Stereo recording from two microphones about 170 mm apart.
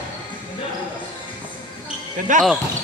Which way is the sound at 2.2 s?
50° right (ahead or behind).